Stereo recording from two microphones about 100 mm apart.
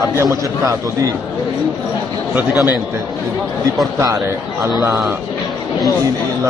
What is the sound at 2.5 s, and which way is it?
Speech, 40° left (ahead or behind).